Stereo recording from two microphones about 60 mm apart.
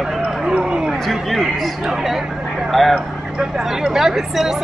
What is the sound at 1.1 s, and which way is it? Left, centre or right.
Speech, centre.